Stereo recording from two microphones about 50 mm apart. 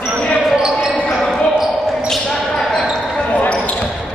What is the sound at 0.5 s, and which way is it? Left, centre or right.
Basketball bounce, centre.